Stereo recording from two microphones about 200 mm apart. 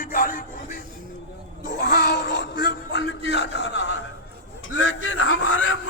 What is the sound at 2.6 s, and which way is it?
Music, 60° left (ahead or behind).